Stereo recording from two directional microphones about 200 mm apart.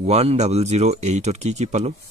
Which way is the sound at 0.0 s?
30° right (ahead or behind).